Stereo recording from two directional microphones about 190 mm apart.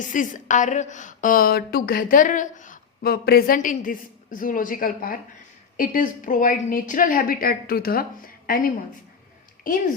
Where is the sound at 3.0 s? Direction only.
55° left (ahead or behind).